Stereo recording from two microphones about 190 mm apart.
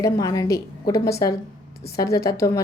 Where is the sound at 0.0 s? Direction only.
20° left (ahead or behind).